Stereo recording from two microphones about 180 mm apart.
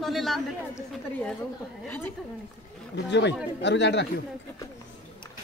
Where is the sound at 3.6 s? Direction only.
75° left (ahead or behind).